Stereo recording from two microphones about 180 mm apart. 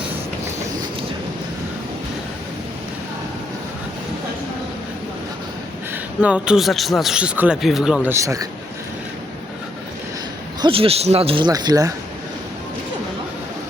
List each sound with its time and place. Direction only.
5.9 s a man's voice: 5° right (ahead or behind)
8.1 s a man's voice: 15° right (ahead or behind)
10.6 s a man's voice: 30° right (ahead or behind)